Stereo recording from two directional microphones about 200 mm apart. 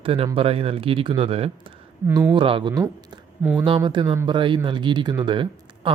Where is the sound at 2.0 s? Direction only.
10° right (ahead or behind).